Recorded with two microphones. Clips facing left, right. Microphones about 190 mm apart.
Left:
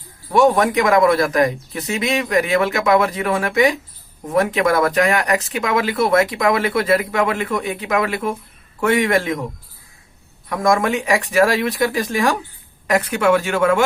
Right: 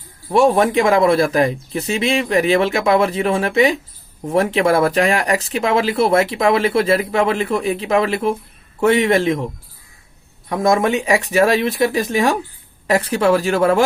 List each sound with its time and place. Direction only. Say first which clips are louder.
0.3 s speech: right 1 dB; 30° right (ahead or behind)
10.5 s speech: right 2 dB; 25° right (ahead or behind)